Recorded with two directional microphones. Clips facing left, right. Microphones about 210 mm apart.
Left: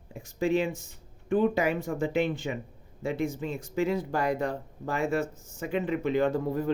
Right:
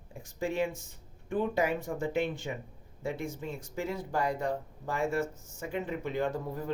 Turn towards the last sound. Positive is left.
turn(degrees=90)